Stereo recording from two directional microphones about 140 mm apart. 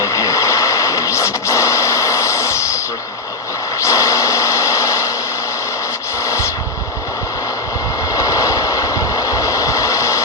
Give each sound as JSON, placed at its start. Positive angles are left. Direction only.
{"t": 0.0, "sound": "radio", "side_deg": 20}
{"t": 3.8, "sound": "a sound", "side_deg": 25}
{"t": 8.1, "sound": "vehicle", "side_deg": 25}